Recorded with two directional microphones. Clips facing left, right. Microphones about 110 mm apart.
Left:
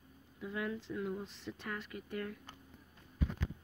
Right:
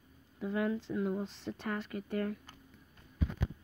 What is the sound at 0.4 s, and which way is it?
Speech, 40° right (ahead or behind).